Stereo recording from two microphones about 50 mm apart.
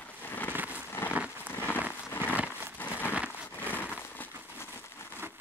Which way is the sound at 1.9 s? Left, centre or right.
Left.